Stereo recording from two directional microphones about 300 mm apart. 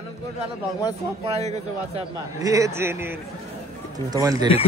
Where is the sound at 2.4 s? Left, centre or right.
Centre.